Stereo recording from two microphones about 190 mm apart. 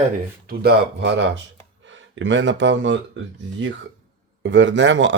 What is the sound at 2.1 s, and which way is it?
Speech, 75° right (ahead or behind).